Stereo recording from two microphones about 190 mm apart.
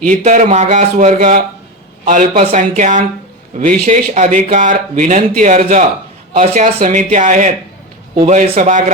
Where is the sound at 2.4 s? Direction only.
35° right (ahead or behind).